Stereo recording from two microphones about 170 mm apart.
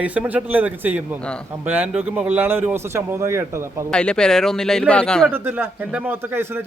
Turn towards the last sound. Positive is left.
turn(degrees=-10)  # may be behind; listen again after turning